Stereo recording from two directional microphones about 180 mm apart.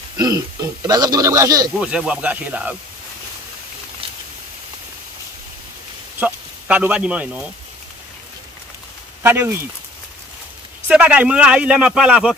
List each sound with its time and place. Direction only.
0.2 s speech: 20° right (ahead or behind)
1.8 s speech: 5° right (ahead or behind)
6.1 s speech: 10° right (ahead or behind)
9.2 s speech: 10° right (ahead or behind)
10.9 s speech: 5° right (ahead or behind)